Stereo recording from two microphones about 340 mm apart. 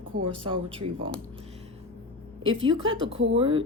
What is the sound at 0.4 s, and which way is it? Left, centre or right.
Speech, centre.